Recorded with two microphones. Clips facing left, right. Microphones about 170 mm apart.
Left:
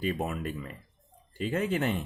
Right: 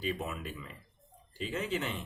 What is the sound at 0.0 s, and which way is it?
Speech, 50° left (ahead or behind).